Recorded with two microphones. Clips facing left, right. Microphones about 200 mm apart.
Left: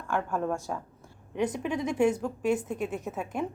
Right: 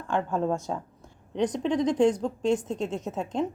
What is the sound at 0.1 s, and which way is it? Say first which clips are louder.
A woman's voice: right 3 dB; 20° right (ahead or behind).